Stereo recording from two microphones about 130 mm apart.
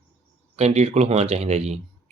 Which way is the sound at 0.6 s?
55° right (ahead or behind).